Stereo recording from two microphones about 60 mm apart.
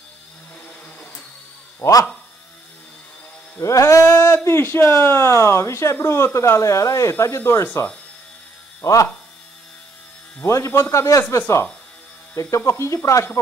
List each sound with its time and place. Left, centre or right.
1.8 s speech: left
3.5 s speech: left
8.8 s speech: left
10.4 s speech: left
11.3 s speech: left
12.4 s speech: left